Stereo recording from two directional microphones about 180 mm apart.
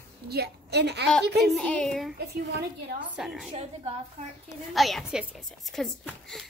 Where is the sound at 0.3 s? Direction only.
65° right (ahead or behind).